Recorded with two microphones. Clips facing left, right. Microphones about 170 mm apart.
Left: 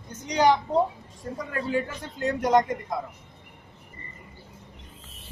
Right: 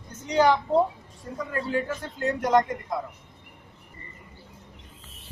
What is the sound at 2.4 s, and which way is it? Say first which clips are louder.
Speech: left 1 dB; 20° left (ahead or behind).